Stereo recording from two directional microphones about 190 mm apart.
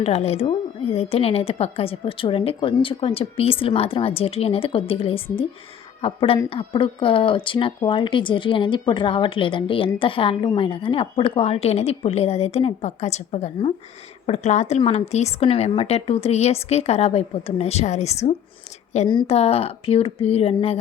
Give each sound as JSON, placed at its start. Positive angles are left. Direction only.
{"t": 0.0, "sound": "a woman's voice", "side_deg": 35}